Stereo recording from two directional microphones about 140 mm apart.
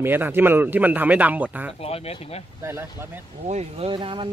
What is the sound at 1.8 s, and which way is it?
Speech, 45° left (ahead or behind).